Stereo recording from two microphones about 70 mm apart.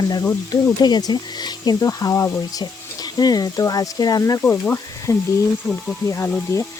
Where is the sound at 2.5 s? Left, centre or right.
Left.